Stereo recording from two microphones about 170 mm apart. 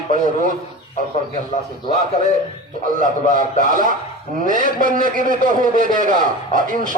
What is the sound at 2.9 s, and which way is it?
A man's voice, 50° right (ahead or behind).